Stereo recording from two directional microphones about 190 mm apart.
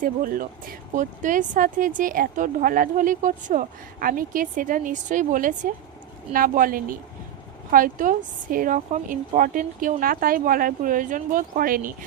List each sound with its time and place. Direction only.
0.0 s speech: 45° right (ahead or behind)